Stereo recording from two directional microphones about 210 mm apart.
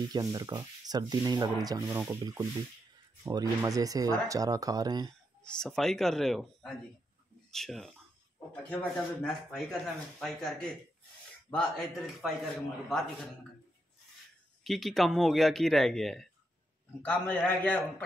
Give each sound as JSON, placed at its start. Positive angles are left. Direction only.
{"t": 0.1, "sound": "speech", "side_deg": -20}
{"t": 5.6, "sound": "speech", "side_deg": 0}
{"t": 14.6, "sound": "a man's voice", "side_deg": 0}